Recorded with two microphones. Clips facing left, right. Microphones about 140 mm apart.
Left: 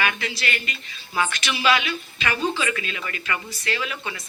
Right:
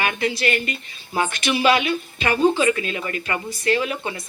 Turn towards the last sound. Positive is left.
turn(degrees=-50)  # may be behind; listen again after turning